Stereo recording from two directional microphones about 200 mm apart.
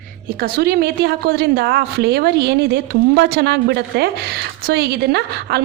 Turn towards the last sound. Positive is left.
turn(degrees=-55)  # may be behind; listen again after turning